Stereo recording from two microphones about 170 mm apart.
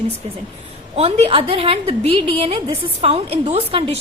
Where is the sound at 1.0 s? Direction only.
35° right (ahead or behind).